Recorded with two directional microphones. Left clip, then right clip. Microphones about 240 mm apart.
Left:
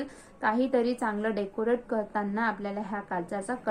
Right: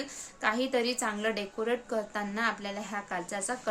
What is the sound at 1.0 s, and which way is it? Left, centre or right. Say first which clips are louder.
A woman's voice: left 2 dB; right.